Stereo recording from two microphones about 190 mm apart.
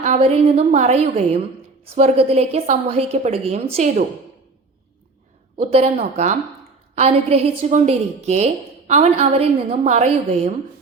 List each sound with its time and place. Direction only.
0.0 s a woman's voice: 35° right (ahead or behind)
5.5 s a woman's voice: 35° right (ahead or behind)